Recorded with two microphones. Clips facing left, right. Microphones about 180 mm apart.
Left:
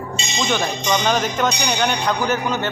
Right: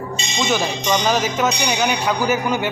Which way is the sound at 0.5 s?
5° right (ahead or behind).